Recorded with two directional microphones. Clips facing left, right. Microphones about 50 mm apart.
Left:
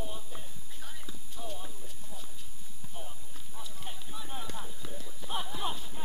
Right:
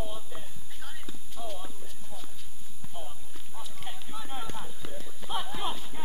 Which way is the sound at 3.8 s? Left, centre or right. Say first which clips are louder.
Right 4 dB; right.